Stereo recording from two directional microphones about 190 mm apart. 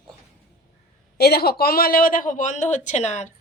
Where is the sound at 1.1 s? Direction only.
55° left (ahead or behind); by 3.3 s 40° left (ahead or behind).